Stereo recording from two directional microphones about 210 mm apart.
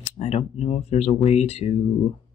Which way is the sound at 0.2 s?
30° left (ahead or behind).